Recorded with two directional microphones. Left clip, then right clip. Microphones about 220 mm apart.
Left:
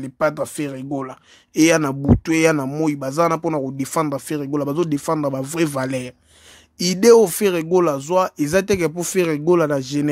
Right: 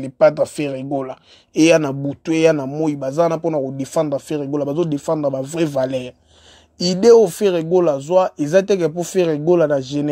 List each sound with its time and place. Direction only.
0.0 s speech: 10° left (ahead or behind)